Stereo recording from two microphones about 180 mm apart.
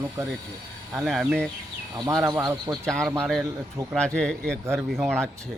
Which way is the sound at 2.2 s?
15° right (ahead or behind).